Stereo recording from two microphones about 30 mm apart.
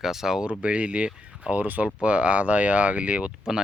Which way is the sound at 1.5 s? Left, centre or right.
Right.